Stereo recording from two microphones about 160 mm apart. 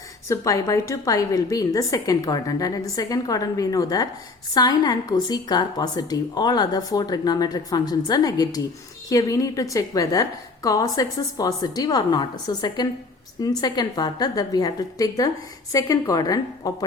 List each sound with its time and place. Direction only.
0.3 s a woman's voice: 20° left (ahead or behind)